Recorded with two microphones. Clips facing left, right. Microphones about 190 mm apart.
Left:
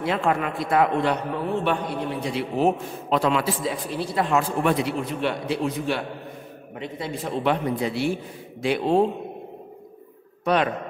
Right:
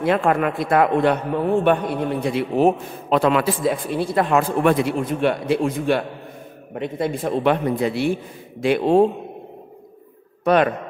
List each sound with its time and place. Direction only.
0.0 s a man's voice: 55° right (ahead or behind)
10.4 s a man's voice: 50° right (ahead or behind)